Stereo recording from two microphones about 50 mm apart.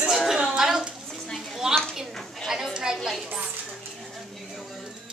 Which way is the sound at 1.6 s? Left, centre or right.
Centre.